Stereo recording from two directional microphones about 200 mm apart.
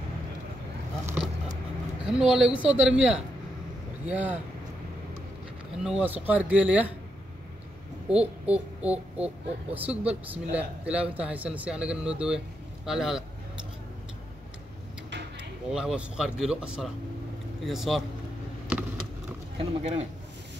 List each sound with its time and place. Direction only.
1.0 s a sound: 5° right (ahead or behind)
2.1 s speech: 5° right (ahead or behind)
5.9 s speech: 5° right (ahead or behind)
8.1 s speech: 5° right (ahead or behind)
15.7 s speech: 5° right (ahead or behind)
18.7 s a sound: 10° right (ahead or behind)
19.6 s speech: 35° right (ahead or behind)